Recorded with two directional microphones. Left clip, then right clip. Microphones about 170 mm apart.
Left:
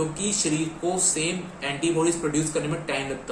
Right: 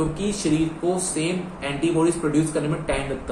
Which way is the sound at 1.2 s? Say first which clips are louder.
Right 2 dB; 15° left (ahead or behind).